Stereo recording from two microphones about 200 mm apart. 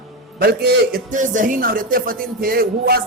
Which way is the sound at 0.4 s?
50° right (ahead or behind).